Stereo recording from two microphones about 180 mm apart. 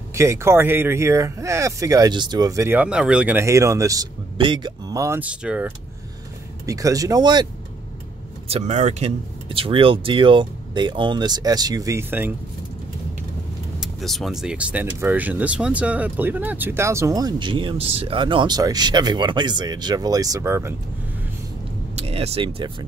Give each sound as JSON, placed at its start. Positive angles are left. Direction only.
{"t": 0.1, "sound": "speech", "side_deg": -15}
{"t": 6.6, "sound": "speech", "side_deg": -20}
{"t": 8.5, "sound": "speech", "side_deg": -35}
{"t": 13.7, "sound": "speech", "side_deg": 0}
{"t": 21.9, "sound": "speech", "side_deg": -35}